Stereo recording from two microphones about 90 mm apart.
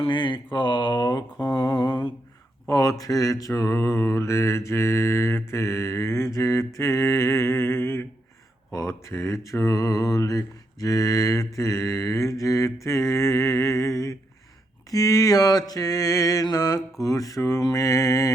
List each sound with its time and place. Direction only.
0.0 s mantra: 65° left (ahead or behind)
2.6 s mantra: 40° left (ahead or behind)